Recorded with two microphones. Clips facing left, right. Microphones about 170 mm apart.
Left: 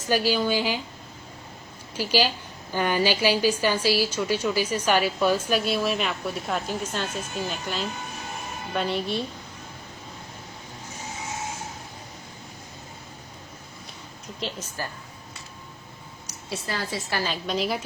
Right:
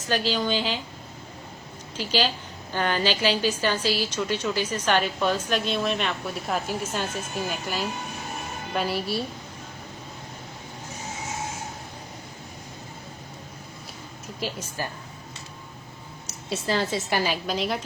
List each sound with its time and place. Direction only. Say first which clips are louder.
0.0 s a woman's voice: left 2 dB; 10° left (ahead or behind)
2.0 s a woman's voice: left 2 dB; 10° left (ahead or behind); by 7.3 s 10° right (ahead or behind)
8.7 s a woman's voice: even; 5° right (ahead or behind)
14.3 s a woman's voice: right 1 dB; 10° right (ahead or behind)
16.5 s a woman's voice: right 5 dB; 25° right (ahead or behind)
17.1 s a woman's voice: right 2 dB; 15° right (ahead or behind); by 17.8 s centre (ahead or behind)